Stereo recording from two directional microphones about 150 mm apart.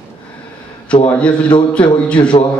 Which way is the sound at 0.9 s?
5° left (ahead or behind).